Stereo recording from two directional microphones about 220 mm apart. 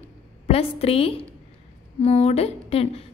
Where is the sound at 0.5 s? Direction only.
25° left (ahead or behind).